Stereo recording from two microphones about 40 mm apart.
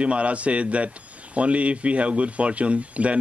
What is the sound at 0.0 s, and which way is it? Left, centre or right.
Mantra, right.